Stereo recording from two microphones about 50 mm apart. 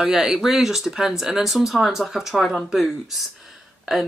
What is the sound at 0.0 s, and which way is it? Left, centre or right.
Speech, centre.